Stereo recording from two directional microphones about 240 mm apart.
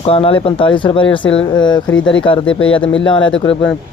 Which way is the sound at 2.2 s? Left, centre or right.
Left.